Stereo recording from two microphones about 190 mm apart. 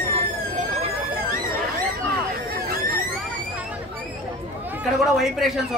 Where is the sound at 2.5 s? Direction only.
50° right (ahead or behind).